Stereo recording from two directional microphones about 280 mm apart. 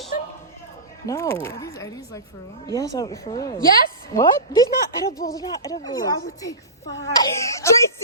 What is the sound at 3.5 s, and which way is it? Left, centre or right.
Speech, left.